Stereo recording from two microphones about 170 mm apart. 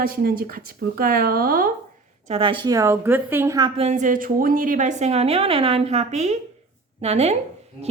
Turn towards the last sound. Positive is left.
turn(degrees=-40)  # may be behind; listen again after turning